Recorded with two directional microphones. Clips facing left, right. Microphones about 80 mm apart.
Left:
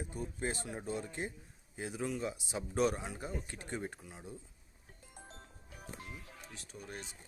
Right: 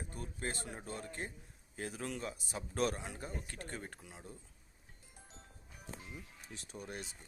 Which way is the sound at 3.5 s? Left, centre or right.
Centre.